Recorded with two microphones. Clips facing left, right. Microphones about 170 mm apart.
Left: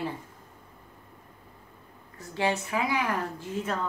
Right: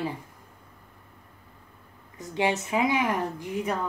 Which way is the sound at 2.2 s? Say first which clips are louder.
Right 2 dB; 20° right (ahead or behind).